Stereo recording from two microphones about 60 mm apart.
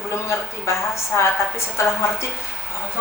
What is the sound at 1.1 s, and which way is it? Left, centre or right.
A woman's voice, left.